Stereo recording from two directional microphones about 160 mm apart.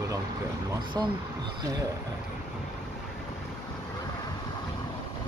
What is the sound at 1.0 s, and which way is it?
Speech, 20° right (ahead or behind).